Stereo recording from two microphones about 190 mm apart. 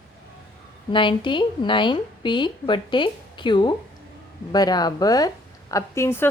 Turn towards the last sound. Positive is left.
turn(degrees=15)  # may be behind; listen again after turning